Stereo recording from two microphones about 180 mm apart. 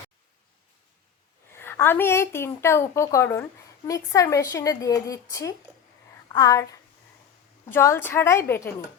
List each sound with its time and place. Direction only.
1.5 s a woman's voice: 10° left (ahead or behind)